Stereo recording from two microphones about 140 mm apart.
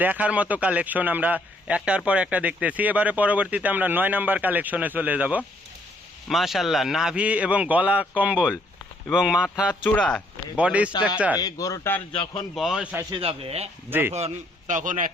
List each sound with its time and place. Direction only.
0.0 s a man's voice: 10° right (ahead or behind)
6.2 s a man's voice: centre (ahead or behind)
9.8 s speech: 10° left (ahead or behind)
10.6 s a man's voice: 10° right (ahead or behind)
11.3 s a man's voice: 25° left (ahead or behind)
12.1 s speech: 35° left (ahead or behind)
12.5 s a man's voice: 5° right (ahead or behind)
13.1 s a man's voice: 40° right (ahead or behind); by 15.1 s 70° right (ahead or behind)